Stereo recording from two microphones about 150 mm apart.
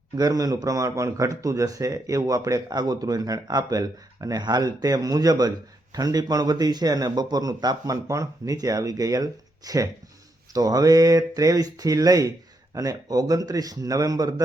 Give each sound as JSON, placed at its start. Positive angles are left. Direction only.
{"t": 0.2, "sound": "speech", "side_deg": -25}